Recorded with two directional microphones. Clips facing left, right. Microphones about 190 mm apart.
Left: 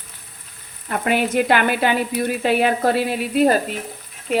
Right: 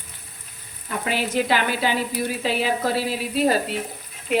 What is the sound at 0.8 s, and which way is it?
Speech, 55° left (ahead or behind).